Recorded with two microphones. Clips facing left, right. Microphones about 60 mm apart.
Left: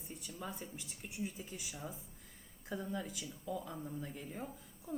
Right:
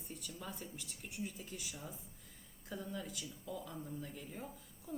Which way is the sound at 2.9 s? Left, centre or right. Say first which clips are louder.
Left 3 dB; centre.